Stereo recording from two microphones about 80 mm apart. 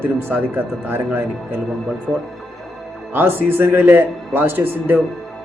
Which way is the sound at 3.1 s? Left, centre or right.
Right.